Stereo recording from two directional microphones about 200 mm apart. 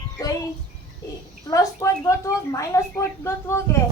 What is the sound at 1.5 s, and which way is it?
A woman's voice, 15° left (ahead or behind).